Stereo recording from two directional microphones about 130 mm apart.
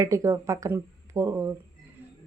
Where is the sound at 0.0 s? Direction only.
25° right (ahead or behind).